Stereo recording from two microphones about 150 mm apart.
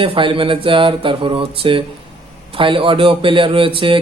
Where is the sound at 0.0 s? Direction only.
35° right (ahead or behind).